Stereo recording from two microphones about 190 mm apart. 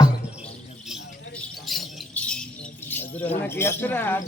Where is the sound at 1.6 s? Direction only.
5° left (ahead or behind).